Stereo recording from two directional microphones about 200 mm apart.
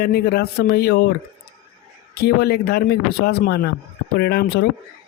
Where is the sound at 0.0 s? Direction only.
55° left (ahead or behind).